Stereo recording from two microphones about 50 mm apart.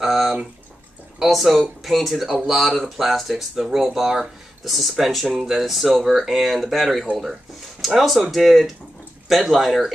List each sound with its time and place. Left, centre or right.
0.0 s a sound: centre
1.2 s speech: centre
7.8 s speech: centre